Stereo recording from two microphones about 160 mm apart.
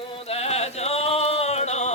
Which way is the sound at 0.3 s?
40° left (ahead or behind).